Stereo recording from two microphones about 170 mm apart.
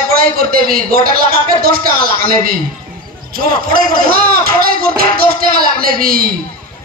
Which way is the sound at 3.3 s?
60° right (ahead or behind).